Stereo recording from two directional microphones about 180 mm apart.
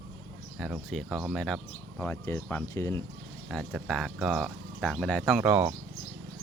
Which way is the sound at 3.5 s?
Centre (ahead or behind).